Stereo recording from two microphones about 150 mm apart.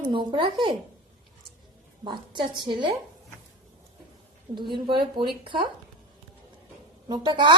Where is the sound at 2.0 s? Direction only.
30° right (ahead or behind).